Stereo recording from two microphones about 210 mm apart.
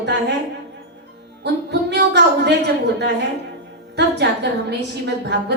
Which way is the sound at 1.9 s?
55° right (ahead or behind).